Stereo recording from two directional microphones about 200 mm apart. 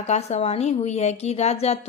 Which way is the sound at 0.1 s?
35° left (ahead or behind).